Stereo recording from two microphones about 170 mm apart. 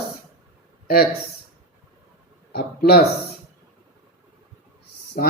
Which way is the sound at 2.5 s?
65° left (ahead or behind).